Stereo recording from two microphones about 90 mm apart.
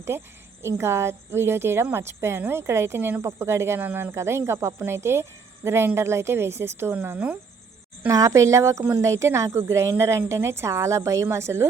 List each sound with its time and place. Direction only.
0.1 s speech: 30° right (ahead or behind)
8.0 s a woman's voice: 40° right (ahead or behind)